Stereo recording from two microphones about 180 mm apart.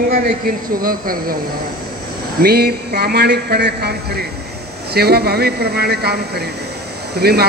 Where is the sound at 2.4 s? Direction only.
60° right (ahead or behind).